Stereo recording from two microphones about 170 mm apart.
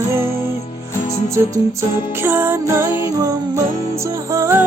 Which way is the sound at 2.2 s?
10° right (ahead or behind).